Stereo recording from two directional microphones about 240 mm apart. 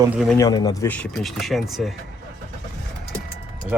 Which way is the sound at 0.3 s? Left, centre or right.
Centre.